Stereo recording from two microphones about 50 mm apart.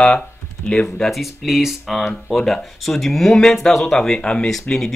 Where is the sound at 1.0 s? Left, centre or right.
Centre.